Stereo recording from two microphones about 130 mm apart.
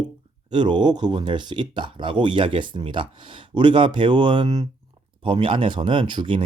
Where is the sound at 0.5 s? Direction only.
35° right (ahead or behind).